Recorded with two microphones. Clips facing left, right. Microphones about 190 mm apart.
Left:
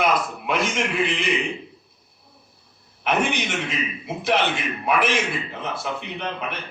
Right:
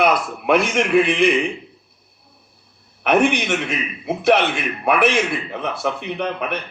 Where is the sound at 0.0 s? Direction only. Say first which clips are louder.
Right 4 dB; 60° right (ahead or behind).